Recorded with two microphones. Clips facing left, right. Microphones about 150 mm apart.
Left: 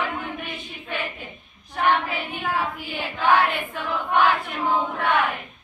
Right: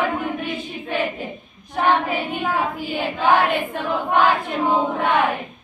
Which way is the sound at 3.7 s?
35° right (ahead or behind).